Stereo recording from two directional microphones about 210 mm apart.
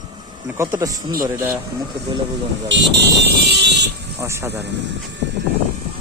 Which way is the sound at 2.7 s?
55° right (ahead or behind).